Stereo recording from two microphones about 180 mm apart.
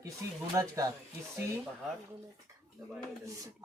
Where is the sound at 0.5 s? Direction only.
15° right (ahead or behind).